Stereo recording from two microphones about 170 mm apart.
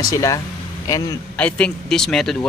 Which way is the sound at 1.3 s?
5° left (ahead or behind).